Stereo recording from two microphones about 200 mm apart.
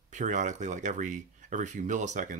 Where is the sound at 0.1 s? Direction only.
40° right (ahead or behind).